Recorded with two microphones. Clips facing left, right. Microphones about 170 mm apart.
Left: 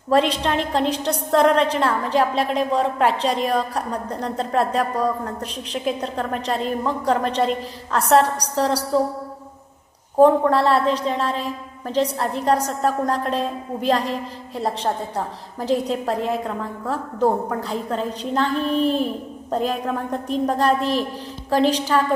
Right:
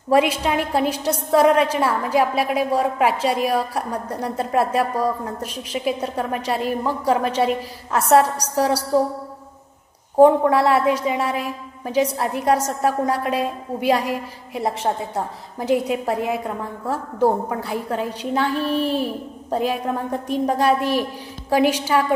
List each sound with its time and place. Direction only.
0.1 s a woman's voice: 10° right (ahead or behind)
10.1 s a woman's voice: 10° right (ahead or behind)